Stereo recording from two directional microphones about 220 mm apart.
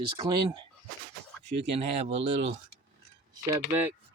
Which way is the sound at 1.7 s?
30° right (ahead or behind).